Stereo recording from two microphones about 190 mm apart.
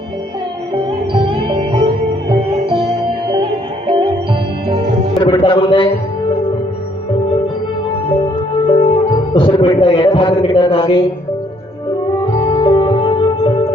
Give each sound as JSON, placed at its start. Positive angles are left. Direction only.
{"t": 0.7, "sound": "music", "side_deg": -25}
{"t": 3.4, "sound": "music", "side_deg": -25}
{"t": 5.2, "sound": "speech", "side_deg": 25}
{"t": 8.2, "sound": "music", "side_deg": 25}
{"t": 12.2, "sound": "music", "side_deg": 25}